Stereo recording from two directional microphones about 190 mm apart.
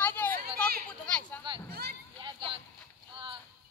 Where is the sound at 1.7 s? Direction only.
55° right (ahead or behind).